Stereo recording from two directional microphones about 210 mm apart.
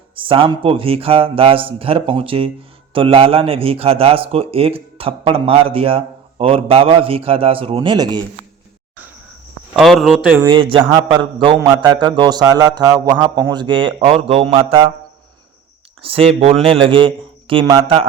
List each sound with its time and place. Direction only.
0.2 s a man's voice: 25° right (ahead or behind)
9.7 s a man's voice: centre (ahead or behind)
10.4 s a man's voice: 25° right (ahead or behind)
16.0 s a man's voice: 25° right (ahead or behind)